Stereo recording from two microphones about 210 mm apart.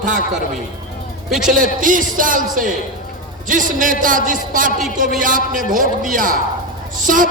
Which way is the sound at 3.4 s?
40° right (ahead or behind).